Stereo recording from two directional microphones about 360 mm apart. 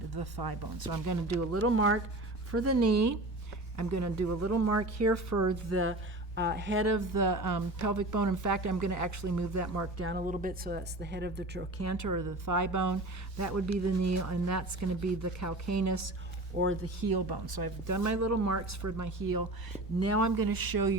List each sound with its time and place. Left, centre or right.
0.1 s a woman's voice: right
5.7 s speech: right
6.8 s a woman's voice: right
10.0 s speech: right
11.8 s a woman's voice: right
16.6 s speech: right
17.1 s speech: right
20.0 s a woman's voice: right
20.3 s speech: right